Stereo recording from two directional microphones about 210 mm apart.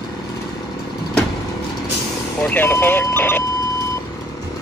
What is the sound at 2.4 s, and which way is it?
Speech, 10° left (ahead or behind).